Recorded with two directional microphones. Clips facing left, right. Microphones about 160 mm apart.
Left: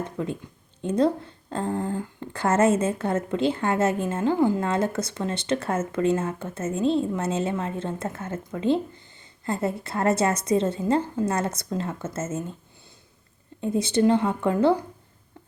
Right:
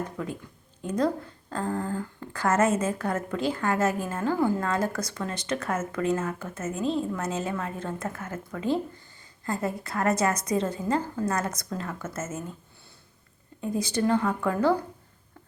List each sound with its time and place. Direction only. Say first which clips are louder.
0.2 s speech: left 4 dB; 25° left (ahead or behind)
13.6 s speech: left 5 dB; 25° left (ahead or behind)